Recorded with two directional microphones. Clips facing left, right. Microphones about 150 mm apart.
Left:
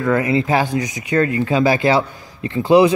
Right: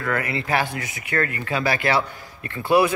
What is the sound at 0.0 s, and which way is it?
Speech, 20° left (ahead or behind).